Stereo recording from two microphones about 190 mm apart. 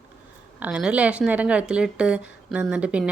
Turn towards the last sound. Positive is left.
turn(degrees=-5)  # may be behind; listen again after turning